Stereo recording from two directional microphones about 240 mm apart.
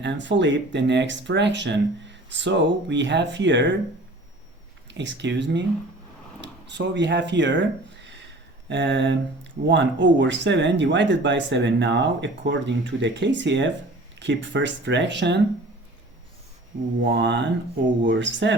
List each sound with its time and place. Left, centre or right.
0.0 s speech: right
4.9 s speech: right
17.0 s speech: right